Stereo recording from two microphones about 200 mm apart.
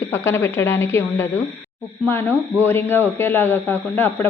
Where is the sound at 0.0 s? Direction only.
10° left (ahead or behind).